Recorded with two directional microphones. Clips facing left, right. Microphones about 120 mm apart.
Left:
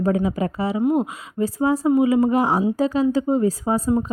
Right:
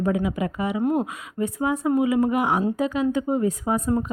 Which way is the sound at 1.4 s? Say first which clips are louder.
Left 4 dB; 30° left (ahead or behind).